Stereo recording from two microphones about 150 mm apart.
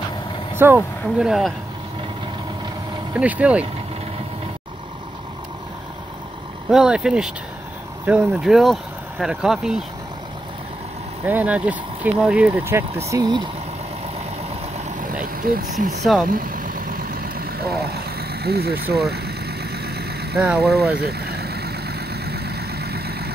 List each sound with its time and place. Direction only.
0.6 s speech: 15° right (ahead or behind)
1.2 s speech: centre (ahead or behind)
3.2 s speech: 10° right (ahead or behind)
6.7 s speech: 5° right (ahead or behind)
11.2 s speech: 10° right (ahead or behind)
15.4 s speech: 70° right (ahead or behind)
16.3 s vehicle: 70° right (ahead or behind); by 20.2 s 90° right
20.3 s speech: 5° right (ahead or behind)
20.6 s speech: 90° right
21.0 s vehicle: 90° right